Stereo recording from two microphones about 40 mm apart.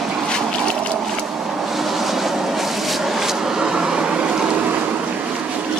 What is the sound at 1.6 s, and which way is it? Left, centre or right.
Vehicle, centre.